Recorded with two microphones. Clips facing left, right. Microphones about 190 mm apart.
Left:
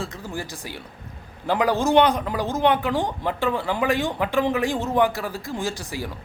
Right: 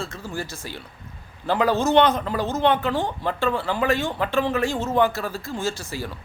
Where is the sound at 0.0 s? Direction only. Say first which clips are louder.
Even; 15° left (ahead or behind).